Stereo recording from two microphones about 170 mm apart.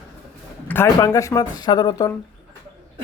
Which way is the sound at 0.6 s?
15° left (ahead or behind).